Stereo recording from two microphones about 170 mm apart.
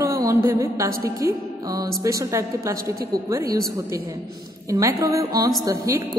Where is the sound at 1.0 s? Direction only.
20° right (ahead or behind).